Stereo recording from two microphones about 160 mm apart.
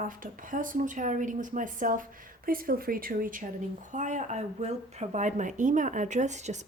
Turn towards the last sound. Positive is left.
turn(degrees=-45)  # may be behind; listen again after turning